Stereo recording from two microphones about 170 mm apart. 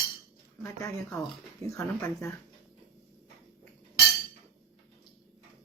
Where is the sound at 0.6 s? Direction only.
15° left (ahead or behind).